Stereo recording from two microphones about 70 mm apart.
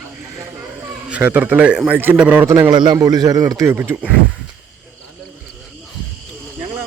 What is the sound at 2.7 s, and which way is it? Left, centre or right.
Speech, right.